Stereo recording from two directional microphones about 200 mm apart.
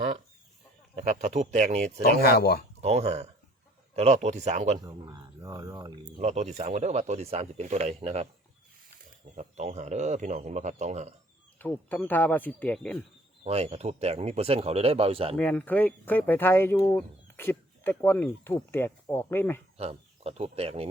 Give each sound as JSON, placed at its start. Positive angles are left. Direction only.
{"t": 0.9, "sound": "speech", "side_deg": -35}
{"t": 2.0, "sound": "speech", "side_deg": 50}
{"t": 2.8, "sound": "speech", "side_deg": -30}
{"t": 4.8, "sound": "a sound", "side_deg": -15}
{"t": 6.1, "sound": "speech", "side_deg": -35}
{"t": 9.3, "sound": "speech", "side_deg": -35}
{"t": 11.6, "sound": "speech", "side_deg": 10}
{"t": 13.4, "sound": "speech", "side_deg": -30}
{"t": 15.4, "sound": "speech", "side_deg": 5}
{"t": 19.7, "sound": "speech", "side_deg": -30}